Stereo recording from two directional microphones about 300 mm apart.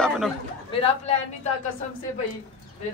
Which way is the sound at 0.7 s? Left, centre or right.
Centre.